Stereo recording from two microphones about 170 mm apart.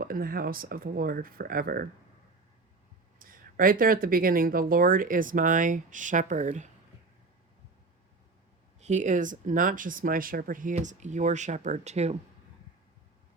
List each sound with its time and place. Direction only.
0.0 s speech: 55° right (ahead or behind)
3.2 s speech: 55° right (ahead or behind)
8.8 s speech: 45° right (ahead or behind)